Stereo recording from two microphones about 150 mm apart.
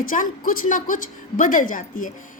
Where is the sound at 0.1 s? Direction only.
65° left (ahead or behind).